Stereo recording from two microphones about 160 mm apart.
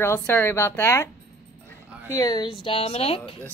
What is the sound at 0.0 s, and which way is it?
Speech, 15° left (ahead or behind).